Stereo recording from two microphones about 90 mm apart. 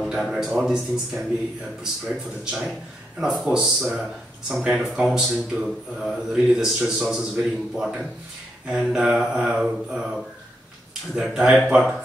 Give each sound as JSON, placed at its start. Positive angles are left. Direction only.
{"t": 0.0, "sound": "a man's voice", "side_deg": -5}
{"t": 0.5, "sound": "mantra", "side_deg": -10}
{"t": 3.2, "sound": "mantra", "side_deg": -5}
{"t": 4.5, "sound": "speech", "side_deg": -5}
{"t": 8.6, "sound": "mantra", "side_deg": -10}